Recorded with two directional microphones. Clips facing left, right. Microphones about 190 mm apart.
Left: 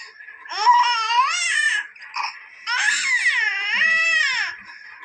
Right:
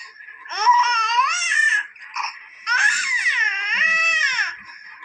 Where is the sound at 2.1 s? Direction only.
15° left (ahead or behind).